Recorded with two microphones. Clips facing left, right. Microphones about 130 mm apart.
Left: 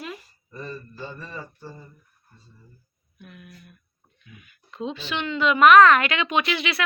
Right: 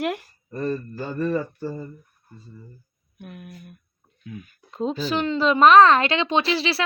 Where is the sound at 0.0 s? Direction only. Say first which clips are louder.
Right 11 dB; 80° right.